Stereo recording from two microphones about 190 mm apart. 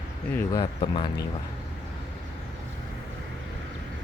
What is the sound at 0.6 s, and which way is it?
Speech, 25° left (ahead or behind).